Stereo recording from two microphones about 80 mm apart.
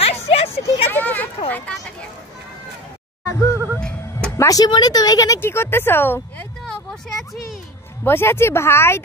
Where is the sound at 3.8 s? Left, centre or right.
Centre.